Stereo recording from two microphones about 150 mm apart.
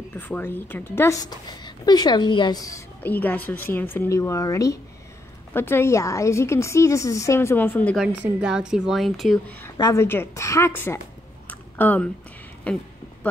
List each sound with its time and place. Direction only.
0.2 s a woman's voice: 10° left (ahead or behind)
3.0 s a woman's voice: 10° left (ahead or behind)
8.0 s a woman's voice: 5° right (ahead or behind)
9.8 s a woman's voice: 25° left (ahead or behind)
10.0 s a woman's voice: 15° left (ahead or behind)